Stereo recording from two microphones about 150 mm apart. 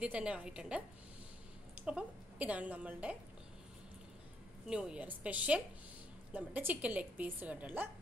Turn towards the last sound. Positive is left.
turn(degrees=-10)  # may be behind; listen again after turning